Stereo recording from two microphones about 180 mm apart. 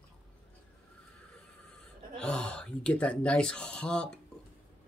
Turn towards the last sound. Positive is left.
turn(degrees=5)  # may be behind; listen again after turning